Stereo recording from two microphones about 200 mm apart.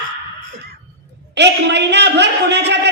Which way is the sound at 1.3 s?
60° right (ahead or behind).